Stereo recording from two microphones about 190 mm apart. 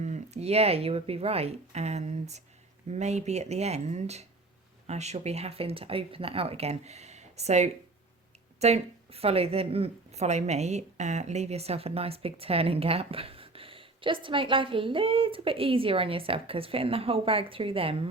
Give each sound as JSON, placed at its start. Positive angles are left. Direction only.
{"t": 0.0, "sound": "speech", "side_deg": -35}